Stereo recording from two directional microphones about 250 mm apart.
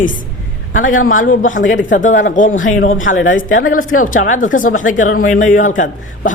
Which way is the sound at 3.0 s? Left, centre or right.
Left.